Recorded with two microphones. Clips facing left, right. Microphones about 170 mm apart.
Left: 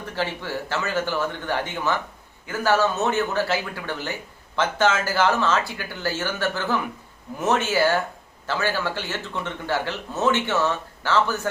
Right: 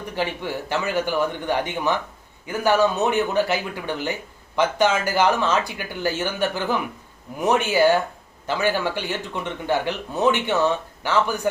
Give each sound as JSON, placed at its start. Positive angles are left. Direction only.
{"t": 0.0, "sound": "speech", "side_deg": -15}